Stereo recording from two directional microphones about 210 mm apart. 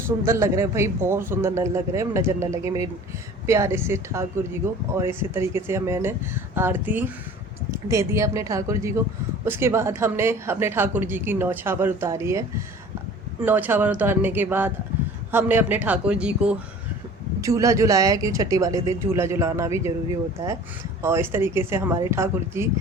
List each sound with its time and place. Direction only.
0.3 s a woman's voice: 15° right (ahead or behind)
17.4 s a woman's voice: 15° right (ahead or behind)
21.0 s a woman's voice: 10° right (ahead or behind)